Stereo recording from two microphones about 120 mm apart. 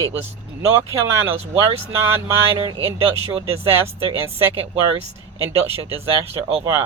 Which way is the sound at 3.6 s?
20° right (ahead or behind).